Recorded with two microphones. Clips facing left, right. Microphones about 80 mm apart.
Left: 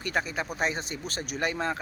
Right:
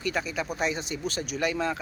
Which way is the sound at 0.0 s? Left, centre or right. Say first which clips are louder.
Even; left.